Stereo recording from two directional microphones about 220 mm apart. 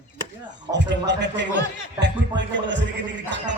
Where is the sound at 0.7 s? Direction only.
50° right (ahead or behind).